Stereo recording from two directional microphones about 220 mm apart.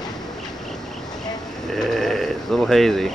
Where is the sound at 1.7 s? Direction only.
Centre (ahead or behind).